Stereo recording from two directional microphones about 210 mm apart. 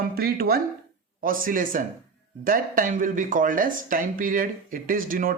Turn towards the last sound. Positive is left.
turn(degrees=-40)  # may be behind; listen again after turning